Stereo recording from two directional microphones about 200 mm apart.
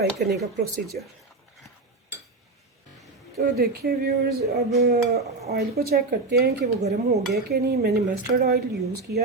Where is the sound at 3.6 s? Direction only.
50° right (ahead or behind).